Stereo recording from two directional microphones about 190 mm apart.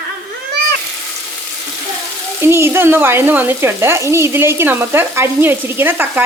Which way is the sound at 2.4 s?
15° right (ahead or behind).